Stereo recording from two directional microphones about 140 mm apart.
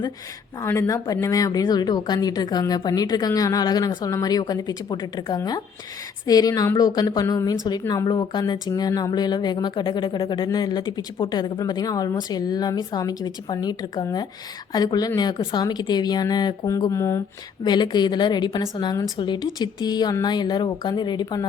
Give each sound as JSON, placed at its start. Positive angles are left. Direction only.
{"t": 0.6, "sound": "speech", "side_deg": 20}
{"t": 17.7, "sound": "a woman's voice", "side_deg": 30}